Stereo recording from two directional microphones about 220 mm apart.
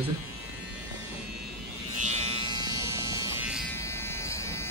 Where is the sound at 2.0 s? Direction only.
25° right (ahead or behind); by 3.6 s 5° right (ahead or behind).